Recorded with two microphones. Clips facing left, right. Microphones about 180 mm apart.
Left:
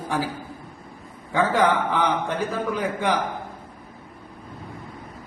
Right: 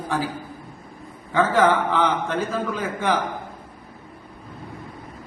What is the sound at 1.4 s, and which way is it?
Speech, 85° right.